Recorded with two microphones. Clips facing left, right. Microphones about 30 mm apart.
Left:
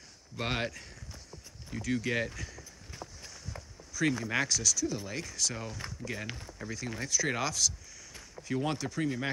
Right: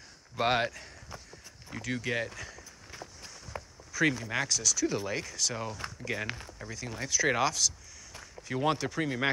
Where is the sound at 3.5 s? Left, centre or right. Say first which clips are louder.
Right 7 dB; right.